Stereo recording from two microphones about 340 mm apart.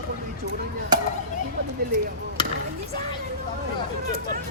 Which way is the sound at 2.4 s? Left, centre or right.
Centre.